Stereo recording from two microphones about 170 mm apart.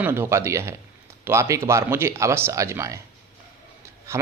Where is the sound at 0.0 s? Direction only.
15° right (ahead or behind).